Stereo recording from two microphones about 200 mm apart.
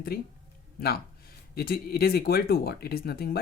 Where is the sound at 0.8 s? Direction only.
50° left (ahead or behind).